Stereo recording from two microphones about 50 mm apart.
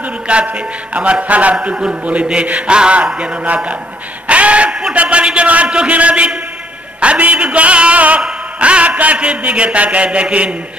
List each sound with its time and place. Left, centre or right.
0.3 s a man's voice: right
4.3 s a sound: right
4.9 s a man's voice: right